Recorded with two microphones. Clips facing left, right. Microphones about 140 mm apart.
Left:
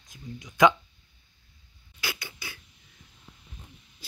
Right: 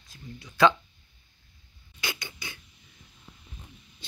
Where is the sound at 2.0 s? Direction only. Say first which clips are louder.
Even; 5° left (ahead or behind).